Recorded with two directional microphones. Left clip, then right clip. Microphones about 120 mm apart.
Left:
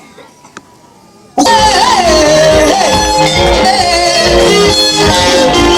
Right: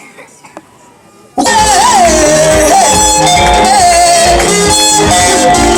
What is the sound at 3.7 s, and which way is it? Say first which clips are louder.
Music: right 3 dB; 25° right (ahead or behind).